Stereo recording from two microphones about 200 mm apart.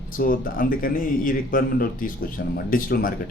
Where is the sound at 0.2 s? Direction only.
45° left (ahead or behind).